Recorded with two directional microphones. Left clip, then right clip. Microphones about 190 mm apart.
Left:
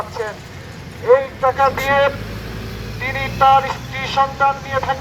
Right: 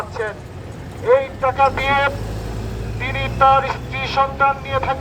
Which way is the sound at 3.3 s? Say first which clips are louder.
Left 1 dB; 10° left (ahead or behind).